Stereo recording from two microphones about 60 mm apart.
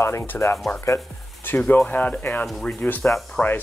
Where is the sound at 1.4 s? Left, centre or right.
Left.